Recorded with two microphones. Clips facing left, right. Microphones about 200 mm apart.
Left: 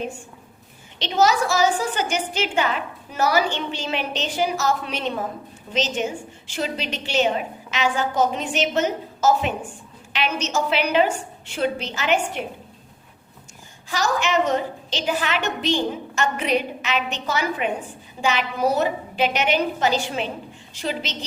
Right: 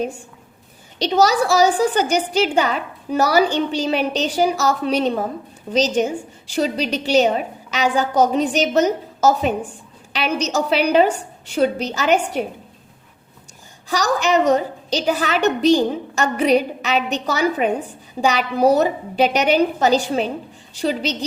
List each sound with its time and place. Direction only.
0.9 s a woman's voice: 40° right (ahead or behind)
13.9 s a woman's voice: 40° right (ahead or behind)